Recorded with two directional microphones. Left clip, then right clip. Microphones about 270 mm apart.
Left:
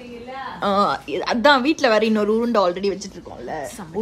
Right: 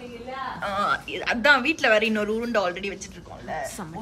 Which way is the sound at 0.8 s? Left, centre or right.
Centre.